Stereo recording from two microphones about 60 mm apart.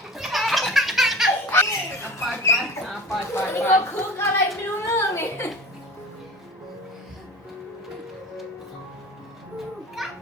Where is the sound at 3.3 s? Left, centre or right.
Left.